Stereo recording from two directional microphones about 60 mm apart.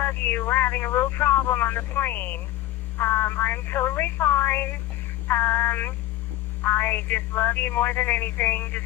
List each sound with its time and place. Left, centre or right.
0.0 s speech: left